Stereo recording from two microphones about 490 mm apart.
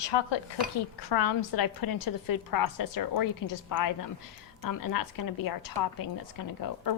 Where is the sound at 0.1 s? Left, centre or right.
Left.